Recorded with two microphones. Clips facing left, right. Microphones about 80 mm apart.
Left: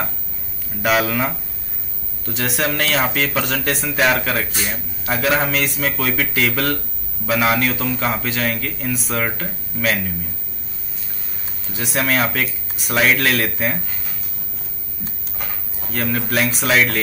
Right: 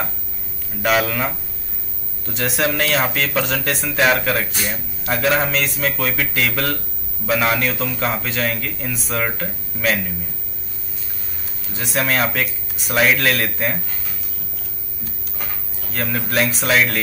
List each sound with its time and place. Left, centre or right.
0.8 s speech: centre
11.7 s speech: centre
15.9 s speech: centre